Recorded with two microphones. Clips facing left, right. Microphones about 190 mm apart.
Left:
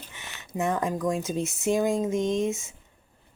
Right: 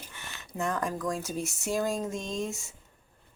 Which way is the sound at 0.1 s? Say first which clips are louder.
Left 7 dB; 20° left (ahead or behind).